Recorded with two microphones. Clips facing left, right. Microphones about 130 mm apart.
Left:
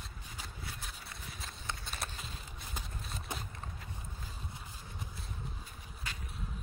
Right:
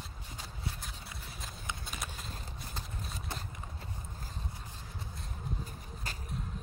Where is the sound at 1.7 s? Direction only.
10° right (ahead or behind).